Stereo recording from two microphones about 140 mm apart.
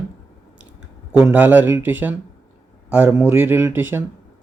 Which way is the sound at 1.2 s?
10° right (ahead or behind).